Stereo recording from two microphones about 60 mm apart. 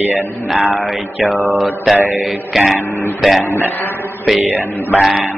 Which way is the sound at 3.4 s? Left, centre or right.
Left.